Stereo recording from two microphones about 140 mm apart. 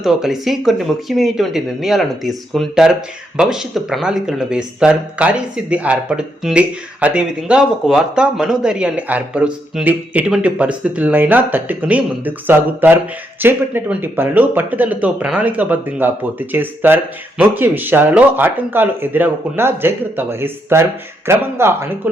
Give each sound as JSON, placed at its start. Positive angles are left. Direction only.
{"t": 0.0, "sound": "speech", "side_deg": 0}